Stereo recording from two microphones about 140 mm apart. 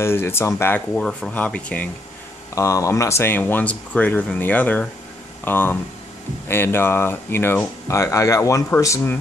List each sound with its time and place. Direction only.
0.0 s speech: 15° left (ahead or behind)
2.5 s speech: 20° left (ahead or behind)